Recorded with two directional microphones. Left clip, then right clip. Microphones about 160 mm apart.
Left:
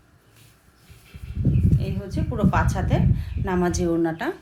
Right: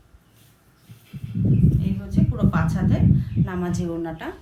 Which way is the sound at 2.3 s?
70° left (ahead or behind).